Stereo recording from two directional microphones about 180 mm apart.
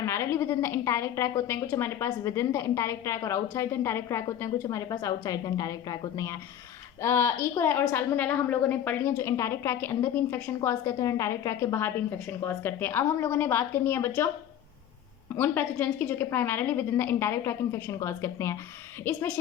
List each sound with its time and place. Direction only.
0.0 s a woman's voice: 15° left (ahead or behind)
15.4 s a woman's voice: 10° left (ahead or behind)